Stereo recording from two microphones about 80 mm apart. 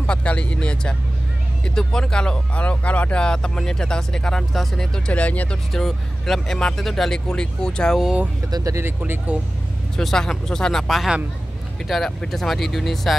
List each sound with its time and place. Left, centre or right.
0.0 s speech: centre
5.7 s speech: centre
8.5 s speech: right
8.7 s speech: right
9.9 s speech: centre